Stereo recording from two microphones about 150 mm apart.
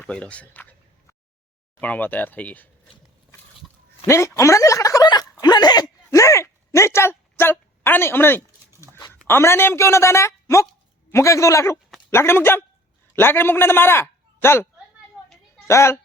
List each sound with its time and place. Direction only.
0.0 s a man's voice: 10° left (ahead or behind)
1.8 s speech: 10° left (ahead or behind)
4.0 s speech: 20° left (ahead or behind)
5.4 s a sound: 25° left (ahead or behind)
7.9 s speech: 15° left (ahead or behind)
8.7 s a sound: 20° right (ahead or behind)
9.2 s a man's voice: 15° left (ahead or behind)